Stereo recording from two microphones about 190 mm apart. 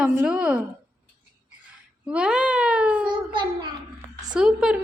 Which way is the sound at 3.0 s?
25° right (ahead or behind).